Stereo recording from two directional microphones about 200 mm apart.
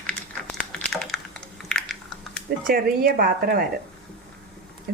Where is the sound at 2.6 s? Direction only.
50° right (ahead or behind).